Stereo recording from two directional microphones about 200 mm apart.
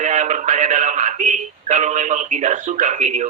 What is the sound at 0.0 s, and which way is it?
Speech, 35° right (ahead or behind).